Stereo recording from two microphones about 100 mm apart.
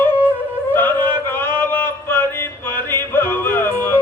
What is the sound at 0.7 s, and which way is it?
Music, 20° left (ahead or behind).